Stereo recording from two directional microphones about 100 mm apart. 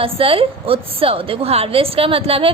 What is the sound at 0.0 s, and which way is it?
A woman's voice, 70° right (ahead or behind).